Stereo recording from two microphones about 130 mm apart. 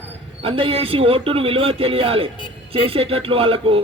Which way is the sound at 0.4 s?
45° right (ahead or behind).